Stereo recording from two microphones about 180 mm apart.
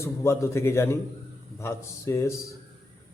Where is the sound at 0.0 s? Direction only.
15° left (ahead or behind).